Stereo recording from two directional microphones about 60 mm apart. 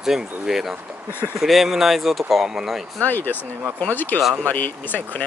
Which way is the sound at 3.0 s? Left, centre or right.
Left.